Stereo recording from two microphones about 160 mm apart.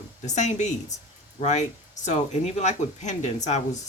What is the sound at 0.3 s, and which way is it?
Speech, 50° left (ahead or behind).